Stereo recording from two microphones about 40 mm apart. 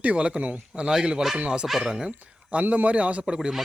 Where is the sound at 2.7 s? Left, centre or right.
Right.